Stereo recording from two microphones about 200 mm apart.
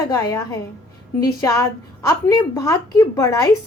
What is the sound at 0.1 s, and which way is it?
A woman's voice, 15° left (ahead or behind).